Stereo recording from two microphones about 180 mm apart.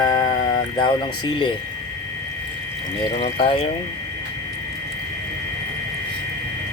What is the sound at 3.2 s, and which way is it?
Speech, 35° left (ahead or behind).